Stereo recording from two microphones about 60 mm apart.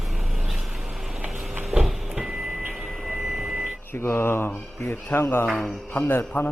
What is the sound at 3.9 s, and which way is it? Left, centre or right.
Speech, left.